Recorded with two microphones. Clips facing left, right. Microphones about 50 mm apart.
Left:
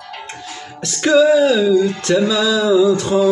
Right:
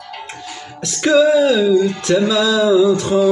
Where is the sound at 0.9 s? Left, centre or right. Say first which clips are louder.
Left 1 dB; centre.